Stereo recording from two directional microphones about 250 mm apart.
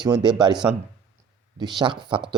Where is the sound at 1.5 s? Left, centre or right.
Centre.